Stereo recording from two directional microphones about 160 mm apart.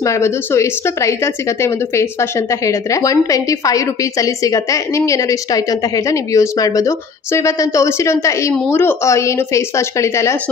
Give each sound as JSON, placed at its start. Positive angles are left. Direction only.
{"t": 0.0, "sound": "a woman's voice", "side_deg": 20}